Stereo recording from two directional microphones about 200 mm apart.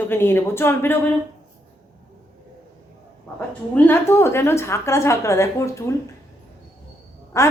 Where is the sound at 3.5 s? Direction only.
10° left (ahead or behind).